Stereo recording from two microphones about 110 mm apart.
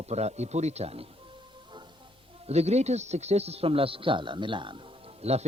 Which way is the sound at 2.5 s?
75° right (ahead or behind).